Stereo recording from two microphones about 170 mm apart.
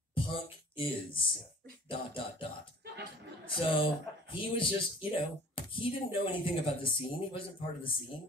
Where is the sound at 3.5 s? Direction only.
30° left (ahead or behind).